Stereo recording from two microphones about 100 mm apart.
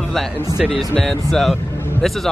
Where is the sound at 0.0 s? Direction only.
Centre (ahead or behind).